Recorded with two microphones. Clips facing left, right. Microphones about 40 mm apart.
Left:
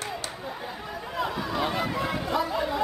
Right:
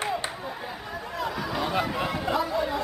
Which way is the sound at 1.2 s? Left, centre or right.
Centre.